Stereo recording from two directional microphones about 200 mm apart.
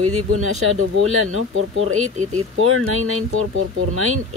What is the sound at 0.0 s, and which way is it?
Speech, 90° right.